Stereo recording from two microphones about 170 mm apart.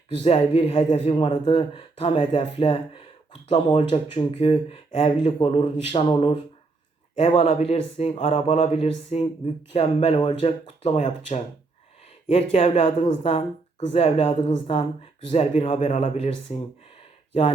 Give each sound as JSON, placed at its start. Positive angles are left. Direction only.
{"t": 0.2, "sound": "speech", "side_deg": 35}